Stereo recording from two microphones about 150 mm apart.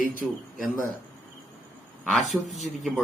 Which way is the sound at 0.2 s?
Centre (ahead or behind).